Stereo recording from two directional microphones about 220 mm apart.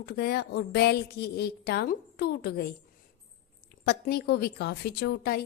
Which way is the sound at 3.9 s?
45° left (ahead or behind).